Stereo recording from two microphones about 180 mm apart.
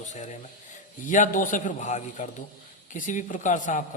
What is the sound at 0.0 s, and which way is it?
A man's voice, 40° left (ahead or behind).